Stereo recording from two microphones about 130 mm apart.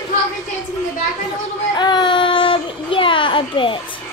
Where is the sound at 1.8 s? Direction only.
35° left (ahead or behind).